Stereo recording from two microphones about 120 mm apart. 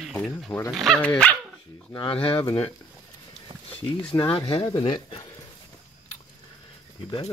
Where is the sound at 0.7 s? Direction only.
Centre (ahead or behind).